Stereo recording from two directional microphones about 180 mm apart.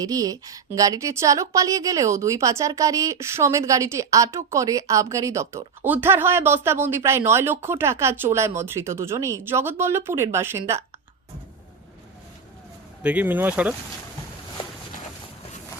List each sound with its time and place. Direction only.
0.0 s a woman's voice: 20° right (ahead or behind)
13.0 s a woman's voice: 10° right (ahead or behind)